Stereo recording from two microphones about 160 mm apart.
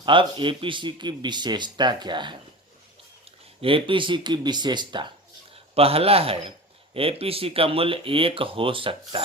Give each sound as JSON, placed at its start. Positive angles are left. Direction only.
{"t": 0.0, "sound": "speech", "side_deg": -30}
{"t": 3.6, "sound": "speech", "side_deg": -35}